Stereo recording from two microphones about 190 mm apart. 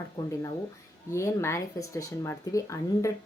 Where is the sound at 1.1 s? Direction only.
15° left (ahead or behind).